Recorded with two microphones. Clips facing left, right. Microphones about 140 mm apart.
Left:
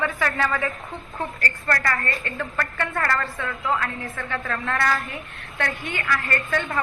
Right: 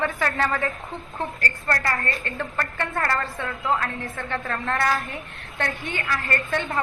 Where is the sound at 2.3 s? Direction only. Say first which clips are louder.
Left 1 dB; 25° right (ahead or behind).